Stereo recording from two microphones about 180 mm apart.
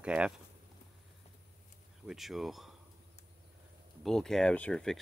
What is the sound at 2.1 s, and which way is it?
Speech, centre (ahead or behind).